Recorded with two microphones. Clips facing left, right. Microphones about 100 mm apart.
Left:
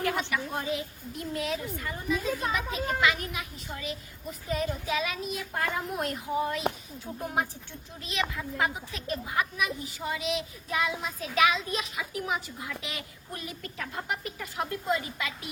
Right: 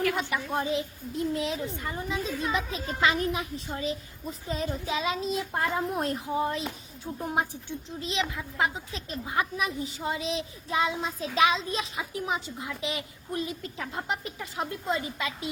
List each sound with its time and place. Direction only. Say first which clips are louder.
0.0 s a woman's voice: right 2 dB; 25° left (ahead or behind)
0.3 s a woman's voice: right 2 dB; 25° right (ahead or behind)